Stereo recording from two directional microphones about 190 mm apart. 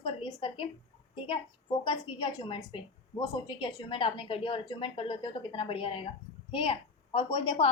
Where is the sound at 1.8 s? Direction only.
25° left (ahead or behind).